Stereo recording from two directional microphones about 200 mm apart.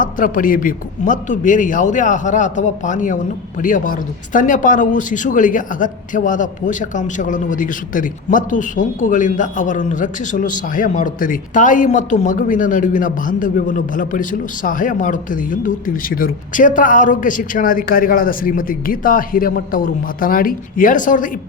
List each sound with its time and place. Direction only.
0.0 s speech: 40° left (ahead or behind)